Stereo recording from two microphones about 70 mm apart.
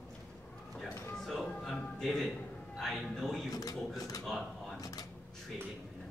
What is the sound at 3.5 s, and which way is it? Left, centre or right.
Speech, left.